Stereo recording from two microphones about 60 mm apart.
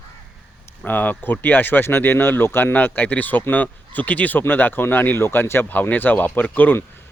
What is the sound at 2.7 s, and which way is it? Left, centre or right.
Speech, left.